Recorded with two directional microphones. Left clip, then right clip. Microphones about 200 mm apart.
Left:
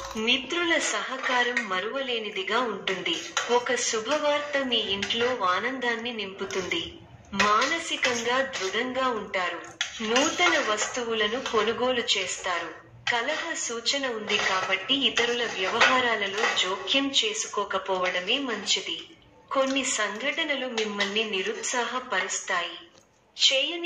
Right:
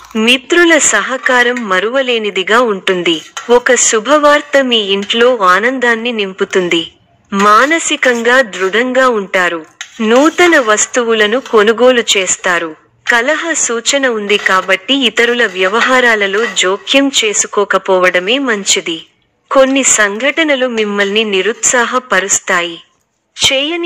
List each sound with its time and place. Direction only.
0.2 s speech: 50° right (ahead or behind)